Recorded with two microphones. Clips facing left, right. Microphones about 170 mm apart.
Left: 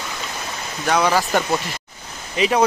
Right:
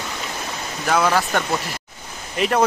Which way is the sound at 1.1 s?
5° left (ahead or behind).